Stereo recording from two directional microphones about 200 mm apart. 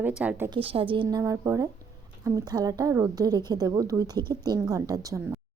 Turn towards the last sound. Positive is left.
turn(degrees=-20)  # may be behind; listen again after turning